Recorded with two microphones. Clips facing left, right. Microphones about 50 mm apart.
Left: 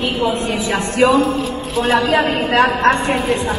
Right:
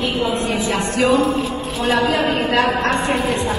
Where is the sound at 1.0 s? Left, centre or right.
Left.